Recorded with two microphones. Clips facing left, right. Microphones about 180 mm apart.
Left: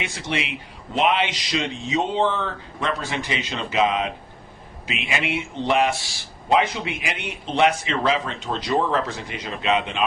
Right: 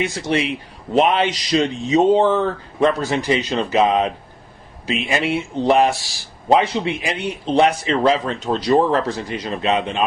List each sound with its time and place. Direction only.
0.0 s a man's voice: 40° right (ahead or behind)